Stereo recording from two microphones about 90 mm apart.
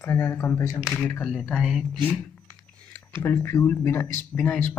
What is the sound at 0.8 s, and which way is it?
Speech, 15° left (ahead or behind).